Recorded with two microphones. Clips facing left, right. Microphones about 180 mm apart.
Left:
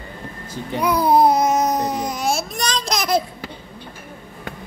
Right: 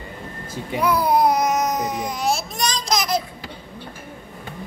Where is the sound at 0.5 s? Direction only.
5° right (ahead or behind).